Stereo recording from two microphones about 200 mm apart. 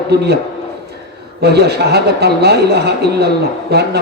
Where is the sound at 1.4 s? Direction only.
55° right (ahead or behind).